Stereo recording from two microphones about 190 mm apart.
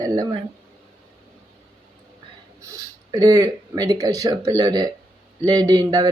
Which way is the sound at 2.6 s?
20° right (ahead or behind).